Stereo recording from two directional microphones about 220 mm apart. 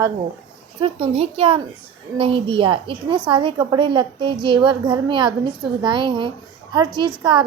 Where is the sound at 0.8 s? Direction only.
25° right (ahead or behind).